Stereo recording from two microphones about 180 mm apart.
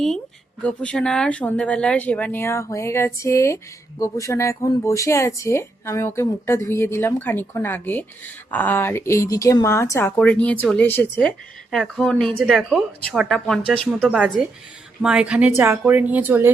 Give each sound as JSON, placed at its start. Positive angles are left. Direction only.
{"t": 0.6, "sound": "speech", "side_deg": 5}